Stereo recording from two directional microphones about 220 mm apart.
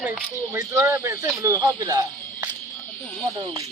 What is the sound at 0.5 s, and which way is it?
Speech, 10° right (ahead or behind).